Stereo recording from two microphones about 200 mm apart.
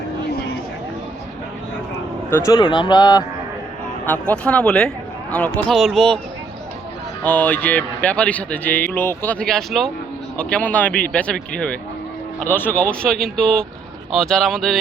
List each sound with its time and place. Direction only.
2.3 s speech: 15° left (ahead or behind)
4.0 s speech: 5° left (ahead or behind)
7.3 s speech: 10° left (ahead or behind)